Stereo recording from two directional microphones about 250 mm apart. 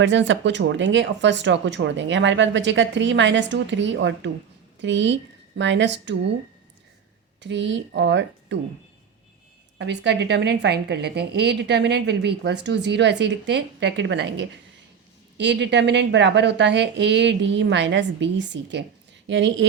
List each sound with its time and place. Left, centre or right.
0.0 s speech: right
7.4 s speech: right
9.7 s speech: right